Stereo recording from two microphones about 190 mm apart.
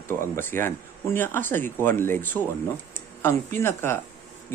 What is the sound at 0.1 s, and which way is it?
Speech, 10° left (ahead or behind).